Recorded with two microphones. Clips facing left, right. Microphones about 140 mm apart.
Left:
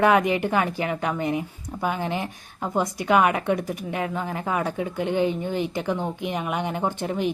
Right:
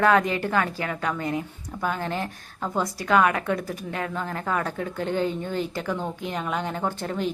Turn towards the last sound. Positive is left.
turn(degrees=15)  # may be behind; listen again after turning